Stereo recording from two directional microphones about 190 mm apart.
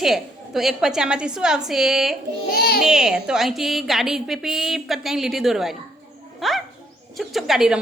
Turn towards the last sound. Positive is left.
turn(degrees=0)  # may be behind; listen again after turning